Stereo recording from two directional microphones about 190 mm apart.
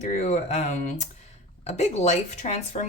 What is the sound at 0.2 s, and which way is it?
Speech, 35° left (ahead or behind).